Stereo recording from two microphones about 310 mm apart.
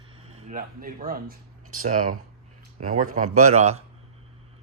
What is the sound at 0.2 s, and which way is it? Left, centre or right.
Speech, centre.